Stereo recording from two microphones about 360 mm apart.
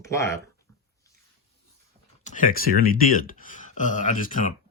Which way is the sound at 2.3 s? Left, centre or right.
Left.